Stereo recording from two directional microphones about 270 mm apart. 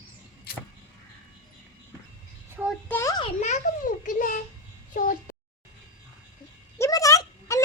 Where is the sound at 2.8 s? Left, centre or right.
Centre.